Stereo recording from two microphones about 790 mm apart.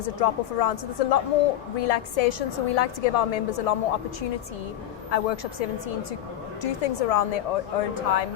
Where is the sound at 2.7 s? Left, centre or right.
Left.